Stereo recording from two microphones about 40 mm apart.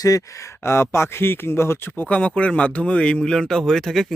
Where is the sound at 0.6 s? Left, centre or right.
Left.